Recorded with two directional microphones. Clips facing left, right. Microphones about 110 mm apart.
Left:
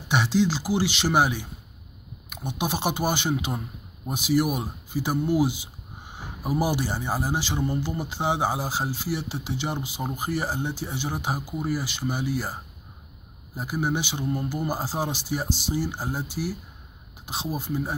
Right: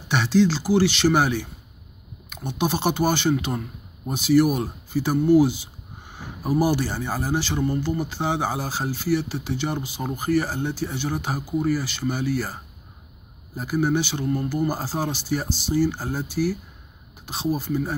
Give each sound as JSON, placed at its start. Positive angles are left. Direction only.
{"t": 0.1, "sound": "speech", "side_deg": 15}
{"t": 13.6, "sound": "speech", "side_deg": 15}